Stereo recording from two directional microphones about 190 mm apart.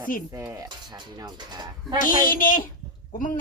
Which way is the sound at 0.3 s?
15° right (ahead or behind).